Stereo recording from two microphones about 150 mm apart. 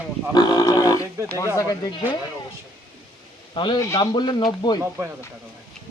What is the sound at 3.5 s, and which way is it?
Speech, 30° left (ahead or behind).